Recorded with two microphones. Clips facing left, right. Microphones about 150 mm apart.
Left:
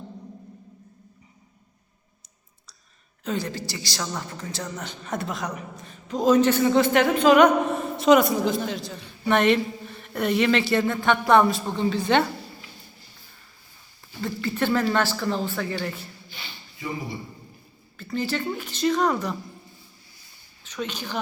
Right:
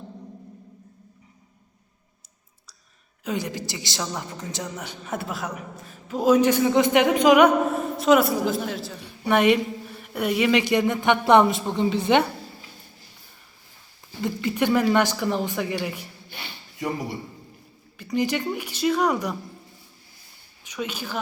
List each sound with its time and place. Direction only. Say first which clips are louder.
3.2 s a man's voice: even; 15° right (ahead or behind)
14.2 s a man's voice: right 2 dB; 15° right (ahead or behind)
16.3 s speech: right 3 dB; 70° right (ahead or behind)
17.9 s a man's voice: right 3 dB; 15° right (ahead or behind)
20.7 s a woman's voice: right 1 dB; 10° right (ahead or behind)